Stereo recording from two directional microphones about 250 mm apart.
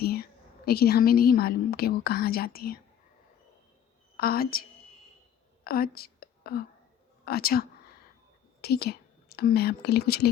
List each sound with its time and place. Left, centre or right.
0.0 s a woman's voice: left
4.2 s a woman's voice: left
5.6 s whispering: left
7.3 s a woman's voice: left
8.6 s speech: left